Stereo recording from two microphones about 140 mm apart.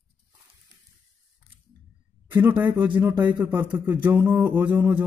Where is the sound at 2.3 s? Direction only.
15° right (ahead or behind).